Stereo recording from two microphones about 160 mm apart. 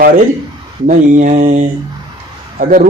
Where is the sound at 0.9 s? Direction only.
50° right (ahead or behind).